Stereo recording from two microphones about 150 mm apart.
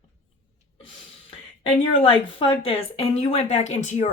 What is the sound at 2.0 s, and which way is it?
Speech, 35° left (ahead or behind).